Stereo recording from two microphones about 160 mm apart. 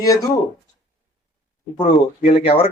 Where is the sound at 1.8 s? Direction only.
35° left (ahead or behind).